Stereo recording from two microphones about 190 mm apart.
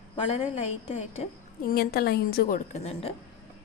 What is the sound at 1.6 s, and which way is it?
Speech, 55° left (ahead or behind).